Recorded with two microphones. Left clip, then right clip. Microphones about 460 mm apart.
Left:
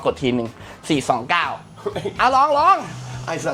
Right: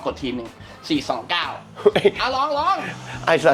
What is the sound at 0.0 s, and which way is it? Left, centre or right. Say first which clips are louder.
Speech: left 6 dB; left.